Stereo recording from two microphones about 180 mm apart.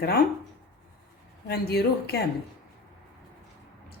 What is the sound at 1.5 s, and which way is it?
Speech, 60° left (ahead or behind).